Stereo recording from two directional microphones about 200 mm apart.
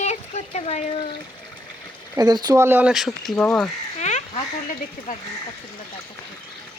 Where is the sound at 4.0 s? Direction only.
35° left (ahead or behind).